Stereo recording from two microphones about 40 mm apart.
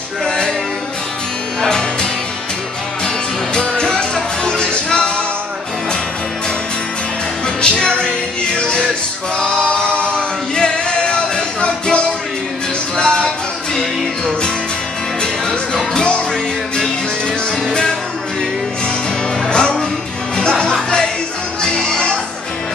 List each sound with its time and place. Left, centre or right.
1.6 s music: centre
3.5 s music: centre
7.4 s music: left
19.5 s music: left